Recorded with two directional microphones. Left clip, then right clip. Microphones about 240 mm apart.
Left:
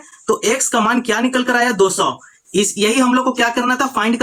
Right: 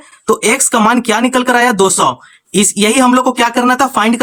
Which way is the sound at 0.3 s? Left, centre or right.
Right.